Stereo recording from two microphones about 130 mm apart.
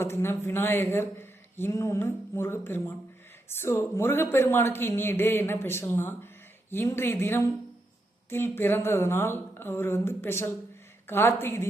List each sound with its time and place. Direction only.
0.0 s a man's voice: 20° left (ahead or behind)